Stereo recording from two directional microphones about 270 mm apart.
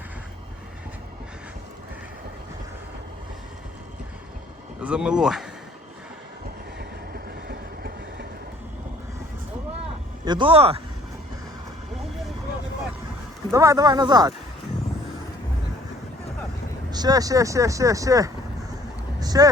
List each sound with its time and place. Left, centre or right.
4.8 s speech: centre
6.7 s train: right
10.2 s speech: centre
13.5 s speech: centre
16.9 s speech: centre
19.2 s a sound: centre